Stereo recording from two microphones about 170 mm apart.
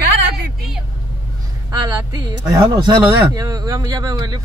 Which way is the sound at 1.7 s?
20° right (ahead or behind).